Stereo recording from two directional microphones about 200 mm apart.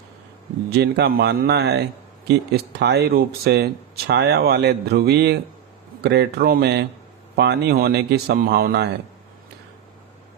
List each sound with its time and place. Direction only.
0.7 s speech: 55° right (ahead or behind)